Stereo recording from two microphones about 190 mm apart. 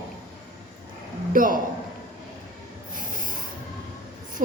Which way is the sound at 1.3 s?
45° right (ahead or behind).